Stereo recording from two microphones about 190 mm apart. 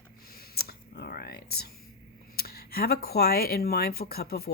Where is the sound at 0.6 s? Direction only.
55° left (ahead or behind).